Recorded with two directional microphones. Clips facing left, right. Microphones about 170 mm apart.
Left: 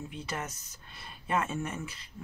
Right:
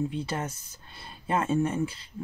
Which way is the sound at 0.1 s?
30° right (ahead or behind).